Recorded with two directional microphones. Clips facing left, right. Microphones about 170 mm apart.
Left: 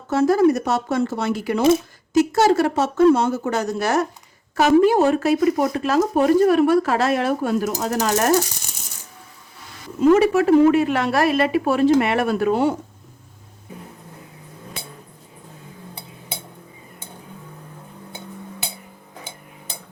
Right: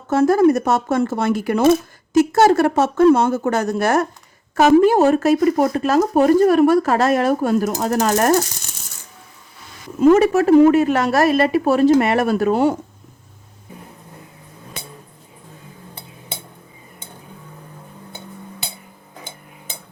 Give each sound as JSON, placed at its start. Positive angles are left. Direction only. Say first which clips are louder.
{"t": 0.1, "sound": "speech", "louder": "right 2 dB", "side_deg": -50}
{"t": 10.0, "sound": "speech", "louder": "right 2 dB", "side_deg": -45}